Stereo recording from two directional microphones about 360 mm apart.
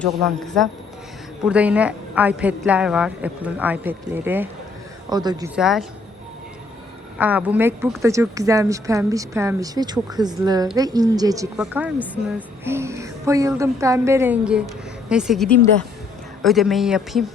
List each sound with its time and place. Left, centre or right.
0.0 s a woman's voice: centre
7.2 s a woman's voice: centre